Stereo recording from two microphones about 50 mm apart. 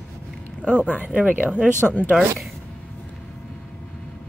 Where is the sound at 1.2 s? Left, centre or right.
Right.